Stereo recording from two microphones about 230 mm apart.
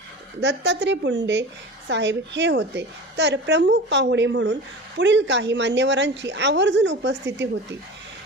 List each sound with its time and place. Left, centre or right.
0.4 s a woman's voice: right